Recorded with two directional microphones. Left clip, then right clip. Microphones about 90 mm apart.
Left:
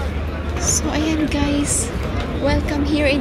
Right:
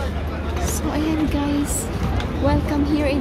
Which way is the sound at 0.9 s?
10° right (ahead or behind).